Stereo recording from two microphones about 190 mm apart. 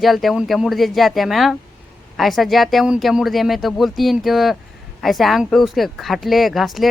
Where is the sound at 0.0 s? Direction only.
Centre (ahead or behind).